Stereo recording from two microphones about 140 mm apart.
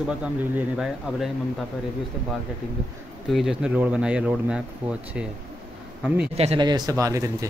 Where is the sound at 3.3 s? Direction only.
Centre (ahead or behind).